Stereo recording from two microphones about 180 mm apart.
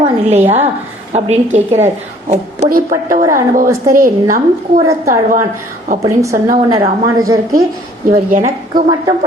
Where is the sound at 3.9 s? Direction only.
50° right (ahead or behind).